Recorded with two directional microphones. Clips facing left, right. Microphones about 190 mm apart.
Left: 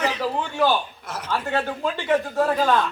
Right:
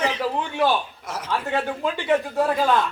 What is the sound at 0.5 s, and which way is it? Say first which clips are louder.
A man's voice: left 1 dB; 5° right (ahead or behind).